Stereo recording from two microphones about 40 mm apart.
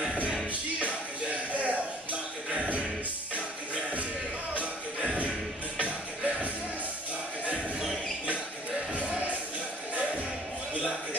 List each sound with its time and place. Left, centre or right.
0.7 s music: right
4.6 s music: right
10.7 s a sound: right